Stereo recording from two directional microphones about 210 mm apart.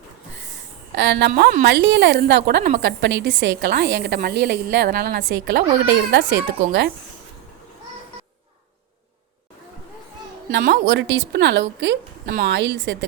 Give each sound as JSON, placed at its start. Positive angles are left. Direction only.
{"t": 0.9, "sound": "a woman's voice", "side_deg": -55}
{"t": 1.3, "sound": "a woman's voice", "side_deg": -45}
{"t": 10.6, "sound": "a woman's voice", "side_deg": -55}